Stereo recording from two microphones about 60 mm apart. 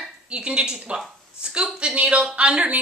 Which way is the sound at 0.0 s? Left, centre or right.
Centre.